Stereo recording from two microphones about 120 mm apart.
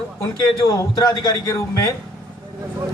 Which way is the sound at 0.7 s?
30° left (ahead or behind).